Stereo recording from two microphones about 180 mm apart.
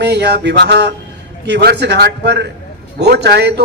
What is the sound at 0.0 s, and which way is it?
A man's voice, 70° right (ahead or behind).